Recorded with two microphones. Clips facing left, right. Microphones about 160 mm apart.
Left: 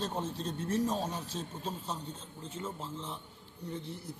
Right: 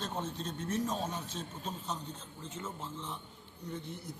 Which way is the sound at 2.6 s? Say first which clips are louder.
Left 3 dB; 15° left (ahead or behind).